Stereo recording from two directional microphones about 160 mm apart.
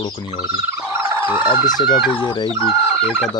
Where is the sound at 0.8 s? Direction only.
10° right (ahead or behind).